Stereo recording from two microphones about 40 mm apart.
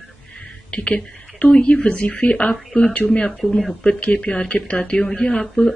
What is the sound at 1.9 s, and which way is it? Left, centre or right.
Speech, left.